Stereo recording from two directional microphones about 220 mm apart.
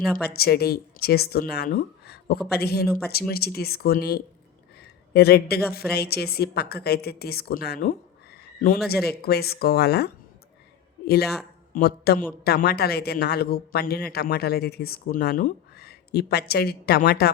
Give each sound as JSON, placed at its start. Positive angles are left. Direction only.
{"t": 0.3, "sound": "a man's voice", "side_deg": 45}